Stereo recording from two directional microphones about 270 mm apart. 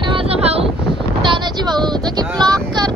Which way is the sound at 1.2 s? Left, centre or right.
Centre.